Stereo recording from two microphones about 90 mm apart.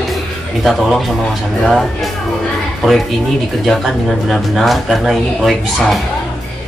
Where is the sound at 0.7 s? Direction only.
Centre (ahead or behind).